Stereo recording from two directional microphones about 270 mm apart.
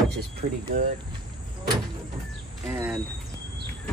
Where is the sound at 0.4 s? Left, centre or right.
Right.